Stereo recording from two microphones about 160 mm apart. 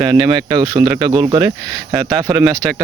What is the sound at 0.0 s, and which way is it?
Speech, 30° right (ahead or behind).